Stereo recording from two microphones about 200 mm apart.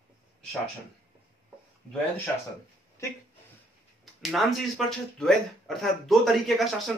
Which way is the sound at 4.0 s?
Centre (ahead or behind).